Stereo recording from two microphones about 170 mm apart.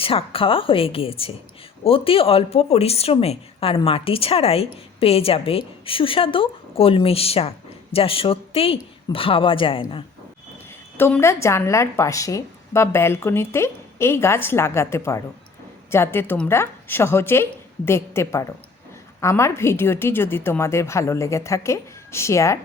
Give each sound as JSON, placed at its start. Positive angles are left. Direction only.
{"t": 0.0, "sound": "speech", "side_deg": 35}
{"t": 10.9, "sound": "speech", "side_deg": 15}